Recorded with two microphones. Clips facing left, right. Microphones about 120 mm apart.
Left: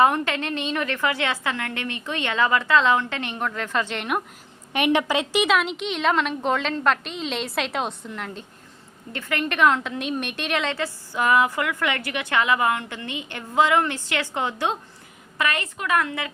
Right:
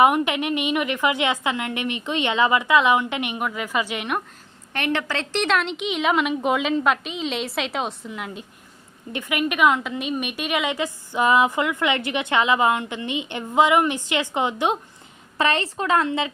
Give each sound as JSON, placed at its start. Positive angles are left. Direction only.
{"t": 0.0, "sound": "a woman's voice", "side_deg": -15}
{"t": 4.7, "sound": "a woman's voice", "side_deg": 15}
{"t": 15.4, "sound": "a woman's voice", "side_deg": -30}